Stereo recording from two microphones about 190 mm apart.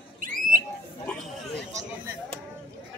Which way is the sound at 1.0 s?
5° left (ahead or behind).